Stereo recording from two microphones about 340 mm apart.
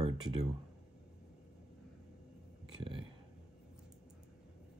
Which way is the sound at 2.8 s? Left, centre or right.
Centre.